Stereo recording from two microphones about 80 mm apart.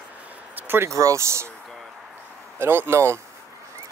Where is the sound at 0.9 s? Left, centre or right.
Right.